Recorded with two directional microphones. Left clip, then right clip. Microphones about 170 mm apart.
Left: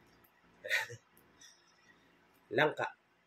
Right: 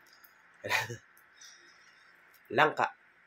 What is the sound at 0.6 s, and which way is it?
Dog, 20° left (ahead or behind).